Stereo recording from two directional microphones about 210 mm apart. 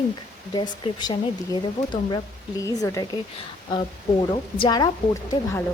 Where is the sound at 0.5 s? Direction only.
20° left (ahead or behind).